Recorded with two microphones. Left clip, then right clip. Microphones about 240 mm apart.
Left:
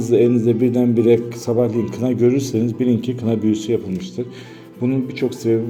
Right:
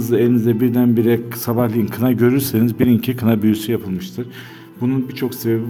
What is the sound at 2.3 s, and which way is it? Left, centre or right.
A man's voice, right.